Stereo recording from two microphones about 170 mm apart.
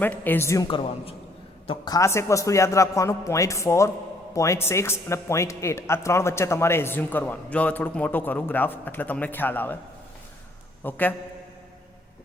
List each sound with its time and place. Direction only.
0.0 s speech: 10° left (ahead or behind)
10.8 s speech: 10° left (ahead or behind)